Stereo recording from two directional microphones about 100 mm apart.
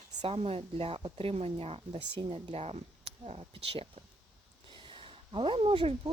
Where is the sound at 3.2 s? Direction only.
75° right (ahead or behind).